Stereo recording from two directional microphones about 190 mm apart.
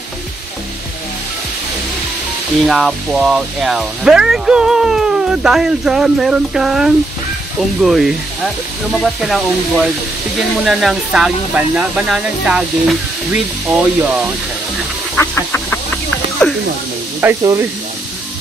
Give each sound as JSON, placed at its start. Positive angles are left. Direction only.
{"t": 2.6, "sound": "speech", "side_deg": 0}
{"t": 15.1, "sound": "a sound", "side_deg": 10}
{"t": 17.2, "sound": "speech", "side_deg": -15}